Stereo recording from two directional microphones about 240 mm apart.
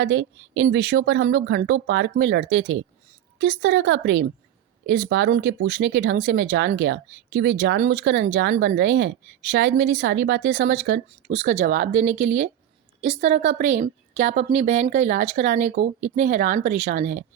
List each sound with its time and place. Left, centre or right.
0.0 s speech: right
11.3 s a woman's voice: right